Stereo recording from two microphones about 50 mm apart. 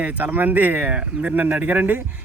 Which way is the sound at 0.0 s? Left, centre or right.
Right.